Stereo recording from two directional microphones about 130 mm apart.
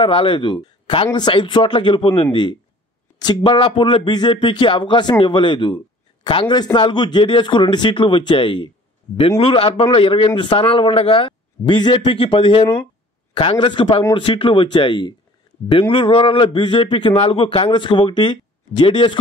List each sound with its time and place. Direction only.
0.0 s a man's voice: 40° left (ahead or behind)